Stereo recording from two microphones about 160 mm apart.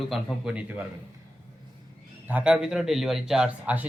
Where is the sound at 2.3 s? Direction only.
10° right (ahead or behind).